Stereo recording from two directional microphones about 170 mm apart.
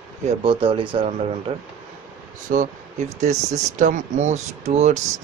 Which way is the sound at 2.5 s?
60° right (ahead or behind).